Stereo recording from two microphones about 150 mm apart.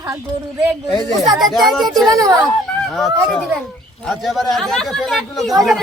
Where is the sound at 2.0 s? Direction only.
25° right (ahead or behind).